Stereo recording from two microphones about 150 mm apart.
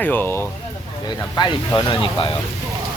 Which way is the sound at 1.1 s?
30° left (ahead or behind).